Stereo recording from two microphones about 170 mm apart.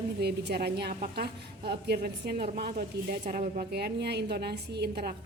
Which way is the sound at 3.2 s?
50° right (ahead or behind).